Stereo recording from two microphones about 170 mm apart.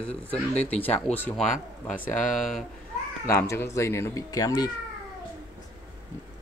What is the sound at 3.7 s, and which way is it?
Speech, 15° left (ahead or behind).